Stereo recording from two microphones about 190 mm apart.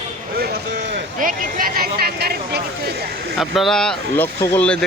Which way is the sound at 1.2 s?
45° right (ahead or behind).